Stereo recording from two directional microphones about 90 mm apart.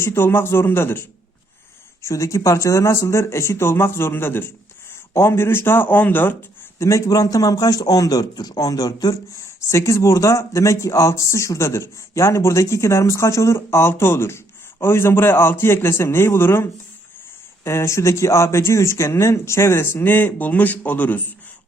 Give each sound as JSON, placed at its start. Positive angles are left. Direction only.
{"t": 0.0, "sound": "speech", "side_deg": 30}
{"t": 2.0, "sound": "speech", "side_deg": 35}
{"t": 6.7, "sound": "a man's voice", "side_deg": 35}
{"t": 9.4, "sound": "speech", "side_deg": 35}